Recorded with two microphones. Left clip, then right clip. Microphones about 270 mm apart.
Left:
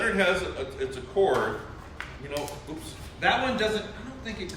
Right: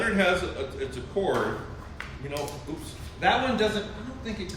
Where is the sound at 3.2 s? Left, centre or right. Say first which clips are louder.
Right 1 dB; centre.